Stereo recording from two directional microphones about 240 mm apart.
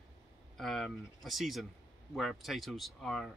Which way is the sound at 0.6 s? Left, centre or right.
Centre.